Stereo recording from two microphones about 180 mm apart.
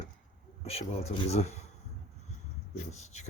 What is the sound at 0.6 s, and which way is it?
Speech, 35° left (ahead or behind).